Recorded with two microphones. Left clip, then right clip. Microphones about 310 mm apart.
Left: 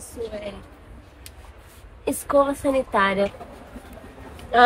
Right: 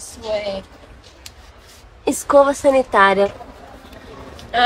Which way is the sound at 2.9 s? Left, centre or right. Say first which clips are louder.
Right 6 dB; right.